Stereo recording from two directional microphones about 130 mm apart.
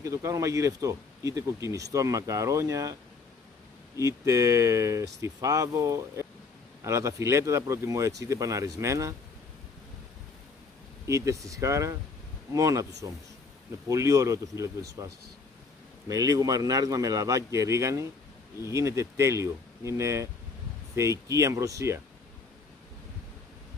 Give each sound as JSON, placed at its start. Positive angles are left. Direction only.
{"t": 0.0, "sound": "speech", "side_deg": -25}
{"t": 4.0, "sound": "speech", "side_deg": -25}
{"t": 11.1, "sound": "speech", "side_deg": -25}
{"t": 16.1, "sound": "speech", "side_deg": -25}